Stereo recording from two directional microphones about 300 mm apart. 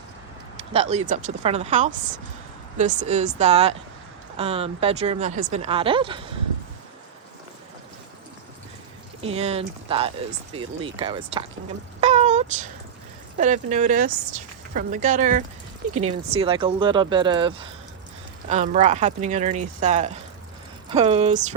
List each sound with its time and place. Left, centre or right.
0.5 s a woman's voice: centre
9.2 s a woman's voice: centre
11.9 s a sound: right
13.3 s a woman's voice: right